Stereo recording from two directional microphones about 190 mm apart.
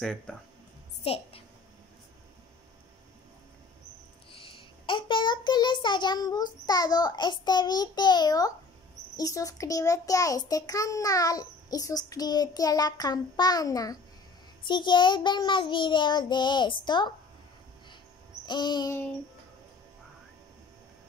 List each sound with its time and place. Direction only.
0.0 s speech: 5° left (ahead or behind)
1.0 s a woman's voice: 30° left (ahead or behind)
4.3 s a child's voice: 25° left (ahead or behind)
18.4 s a child's voice: 25° left (ahead or behind)